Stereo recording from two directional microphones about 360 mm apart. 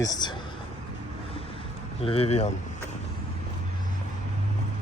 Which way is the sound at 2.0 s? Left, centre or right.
Centre.